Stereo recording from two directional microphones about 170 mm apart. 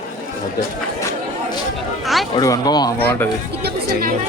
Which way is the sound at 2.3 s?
20° left (ahead or behind).